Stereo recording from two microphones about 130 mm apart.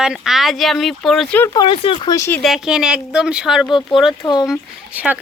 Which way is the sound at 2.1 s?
20° left (ahead or behind).